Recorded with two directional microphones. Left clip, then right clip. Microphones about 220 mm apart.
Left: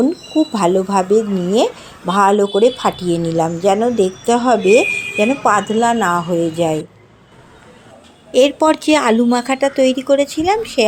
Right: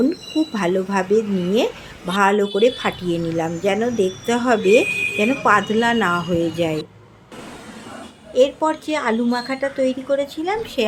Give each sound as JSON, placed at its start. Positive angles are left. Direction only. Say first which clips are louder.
{"t": 0.5, "sound": "speech", "louder": "left 6 dB", "side_deg": 15}
{"t": 8.3, "sound": "a woman's voice", "louder": "left 5 dB", "side_deg": 35}